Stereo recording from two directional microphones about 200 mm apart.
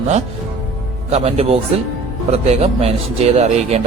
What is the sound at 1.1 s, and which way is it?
Speech, 30° right (ahead or behind).